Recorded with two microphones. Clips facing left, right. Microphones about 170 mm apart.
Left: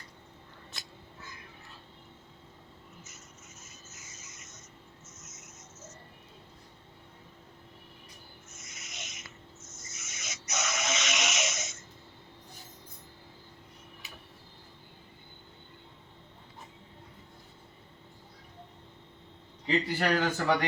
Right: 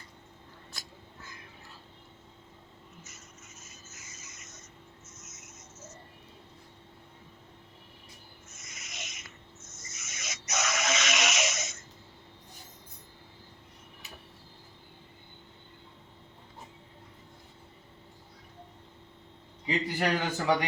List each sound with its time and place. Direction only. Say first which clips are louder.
8.6 s owl: right 2 dB; 90° right
9.9 s a sound: right 2 dB; 90° right
19.6 s a man's voice: left 1 dB; 10° right (ahead or behind)